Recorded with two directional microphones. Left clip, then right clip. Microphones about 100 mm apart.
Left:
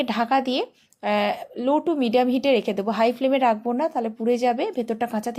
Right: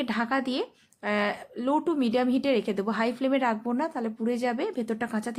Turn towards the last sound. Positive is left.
turn(degrees=20)  # may be behind; listen again after turning